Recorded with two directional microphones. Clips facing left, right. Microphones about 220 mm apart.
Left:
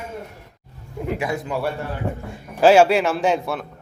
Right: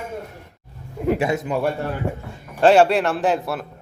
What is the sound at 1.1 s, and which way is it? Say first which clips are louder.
Speech: right 3 dB; 25° right (ahead or behind).